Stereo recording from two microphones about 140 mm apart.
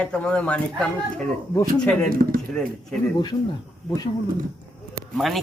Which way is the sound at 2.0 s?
90° right.